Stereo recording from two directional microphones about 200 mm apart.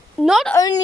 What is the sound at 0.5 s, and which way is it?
Speech, 20° left (ahead or behind).